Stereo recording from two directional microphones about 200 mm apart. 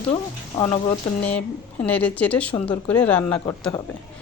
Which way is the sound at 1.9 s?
10° left (ahead or behind).